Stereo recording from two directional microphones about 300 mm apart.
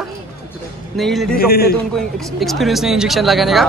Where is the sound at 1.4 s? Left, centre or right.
Left.